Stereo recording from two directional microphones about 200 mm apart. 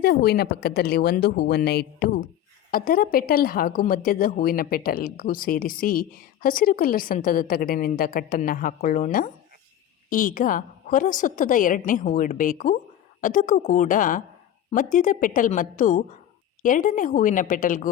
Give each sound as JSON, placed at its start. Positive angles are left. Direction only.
{"t": 0.0, "sound": "a woman's voice", "side_deg": 50}